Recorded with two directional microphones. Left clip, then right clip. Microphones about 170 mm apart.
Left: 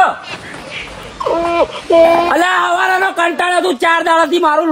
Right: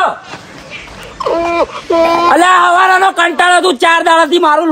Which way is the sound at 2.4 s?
45° right (ahead or behind).